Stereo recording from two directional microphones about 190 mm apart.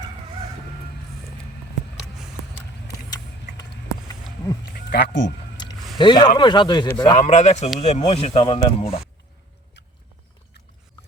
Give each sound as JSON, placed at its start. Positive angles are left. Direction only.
{"t": 4.6, "sound": "a sound", "side_deg": 55}
{"t": 6.0, "sound": "speech", "side_deg": 25}
{"t": 7.2, "sound": "speech", "side_deg": 35}